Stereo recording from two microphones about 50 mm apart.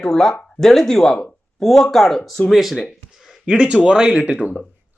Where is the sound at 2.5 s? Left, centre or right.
Centre.